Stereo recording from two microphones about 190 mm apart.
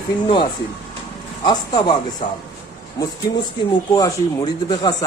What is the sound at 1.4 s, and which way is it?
Speech, 25° left (ahead or behind).